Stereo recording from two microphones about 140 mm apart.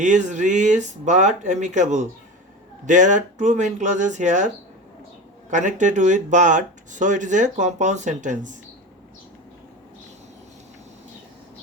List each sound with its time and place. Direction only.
0.0 s speech: 60° right (ahead or behind)